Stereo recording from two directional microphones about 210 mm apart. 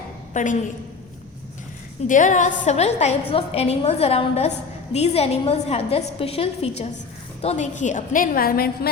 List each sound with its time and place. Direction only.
0.4 s a woman's voice: 35° left (ahead or behind)
2.0 s a woman's voice: 35° left (ahead or behind)